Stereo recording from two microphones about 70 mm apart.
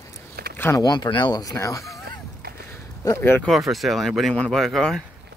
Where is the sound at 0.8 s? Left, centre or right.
Left.